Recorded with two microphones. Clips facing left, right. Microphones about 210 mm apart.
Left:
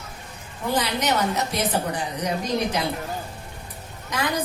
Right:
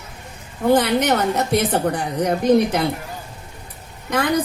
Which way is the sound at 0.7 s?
55° right (ahead or behind).